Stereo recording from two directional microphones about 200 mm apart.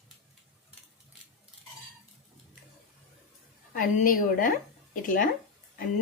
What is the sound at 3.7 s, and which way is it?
A woman's voice, 45° left (ahead or behind).